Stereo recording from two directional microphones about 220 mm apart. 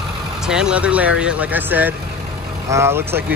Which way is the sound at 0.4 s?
5° right (ahead or behind).